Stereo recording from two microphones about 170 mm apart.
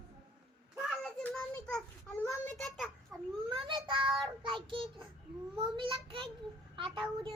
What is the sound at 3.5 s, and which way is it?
Child singing, 25° right (ahead or behind).